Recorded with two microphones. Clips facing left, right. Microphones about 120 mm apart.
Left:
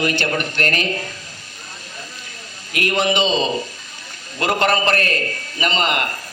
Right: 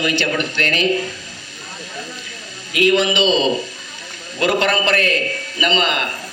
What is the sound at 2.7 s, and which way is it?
A man's voice, 50° left (ahead or behind).